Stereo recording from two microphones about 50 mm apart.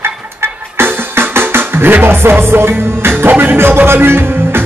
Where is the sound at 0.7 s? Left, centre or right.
Right.